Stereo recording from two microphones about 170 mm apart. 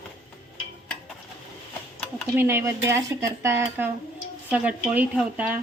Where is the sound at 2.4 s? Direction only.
15° right (ahead or behind).